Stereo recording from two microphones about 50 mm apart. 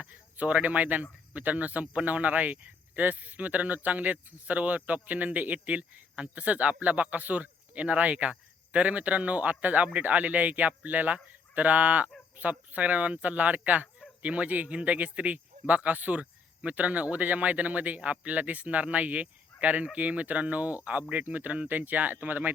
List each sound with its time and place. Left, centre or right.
0.1 s speech: right